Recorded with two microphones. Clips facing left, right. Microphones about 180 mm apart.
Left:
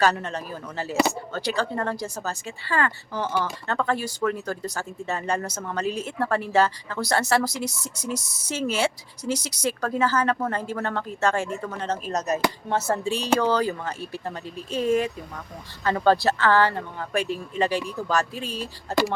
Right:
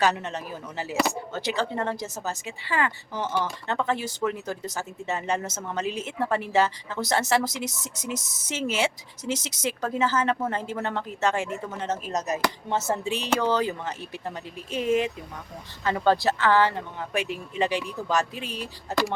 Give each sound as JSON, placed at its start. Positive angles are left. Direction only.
{"t": 0.0, "sound": "speech", "side_deg": -20}